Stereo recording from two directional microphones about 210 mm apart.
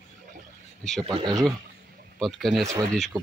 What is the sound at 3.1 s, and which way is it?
Speech, 20° right (ahead or behind).